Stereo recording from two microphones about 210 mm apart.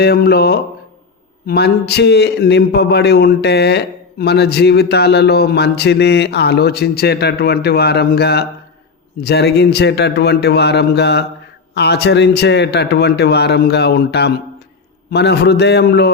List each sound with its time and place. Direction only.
0.0 s a man's voice: 50° left (ahead or behind)